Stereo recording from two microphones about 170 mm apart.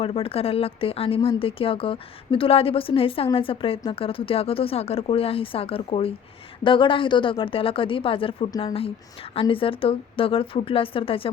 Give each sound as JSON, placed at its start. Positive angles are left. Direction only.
{"t": 0.0, "sound": "speech", "side_deg": 35}